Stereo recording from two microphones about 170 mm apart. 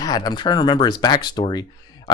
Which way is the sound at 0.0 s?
25° left (ahead or behind).